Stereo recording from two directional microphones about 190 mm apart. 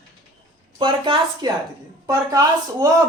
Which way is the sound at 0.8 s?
25° right (ahead or behind).